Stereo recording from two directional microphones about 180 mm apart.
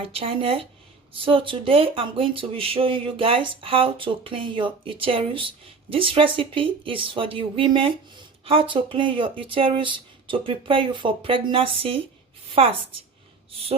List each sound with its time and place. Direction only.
0.0 s speech: 30° right (ahead or behind)